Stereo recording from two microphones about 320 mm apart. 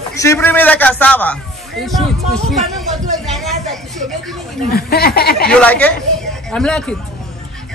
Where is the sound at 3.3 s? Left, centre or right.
Centre.